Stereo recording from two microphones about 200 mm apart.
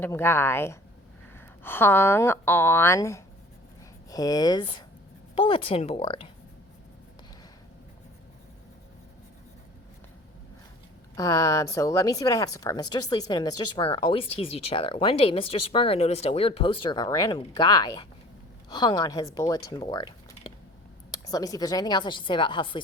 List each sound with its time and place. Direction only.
0.0 s speech: 10° left (ahead or behind); by 6.3 s 25° left (ahead or behind)
11.1 s speech: 15° left (ahead or behind)
21.2 s speech: 20° left (ahead or behind)